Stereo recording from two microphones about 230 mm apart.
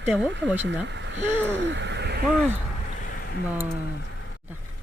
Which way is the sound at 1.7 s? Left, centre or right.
Right.